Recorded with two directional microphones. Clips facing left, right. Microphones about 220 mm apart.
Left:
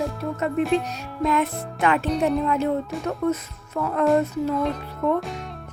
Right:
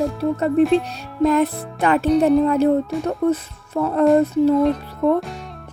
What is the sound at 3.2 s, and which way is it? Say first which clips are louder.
Speech: right 4 dB; 30° right (ahead or behind).